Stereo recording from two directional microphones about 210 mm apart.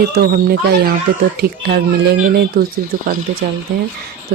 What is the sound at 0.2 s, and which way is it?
A child's voice, 45° right (ahead or behind).